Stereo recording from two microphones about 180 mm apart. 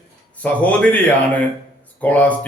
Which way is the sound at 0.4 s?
5° left (ahead or behind).